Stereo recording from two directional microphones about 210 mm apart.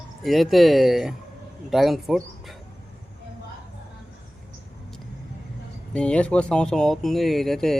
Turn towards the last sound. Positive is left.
turn(degrees=0)  # may be behind; listen again after turning